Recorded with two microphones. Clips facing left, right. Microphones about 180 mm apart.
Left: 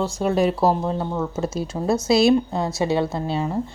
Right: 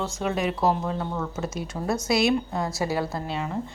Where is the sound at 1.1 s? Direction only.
20° left (ahead or behind).